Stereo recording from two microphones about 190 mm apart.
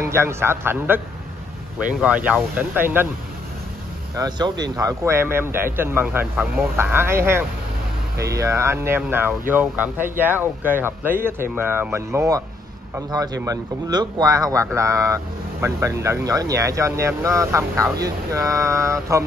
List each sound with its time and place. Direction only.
0.0 s speech: 15° right (ahead or behind)
4.6 s speech: 20° right (ahead or behind)